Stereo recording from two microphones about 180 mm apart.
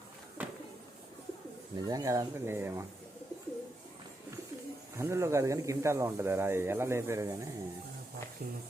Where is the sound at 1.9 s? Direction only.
20° right (ahead or behind).